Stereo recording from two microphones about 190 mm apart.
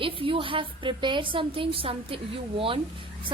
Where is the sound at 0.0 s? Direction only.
25° right (ahead or behind).